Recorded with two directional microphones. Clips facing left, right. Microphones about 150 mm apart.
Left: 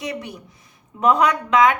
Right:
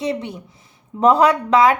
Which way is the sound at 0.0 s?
25° right (ahead or behind).